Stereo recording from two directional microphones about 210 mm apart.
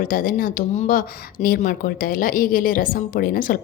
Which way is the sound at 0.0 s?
40° left (ahead or behind).